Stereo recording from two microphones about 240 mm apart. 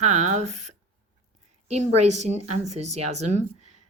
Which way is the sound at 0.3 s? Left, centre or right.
Right.